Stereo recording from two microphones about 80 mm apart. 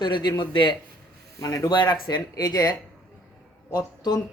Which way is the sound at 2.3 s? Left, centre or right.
Left.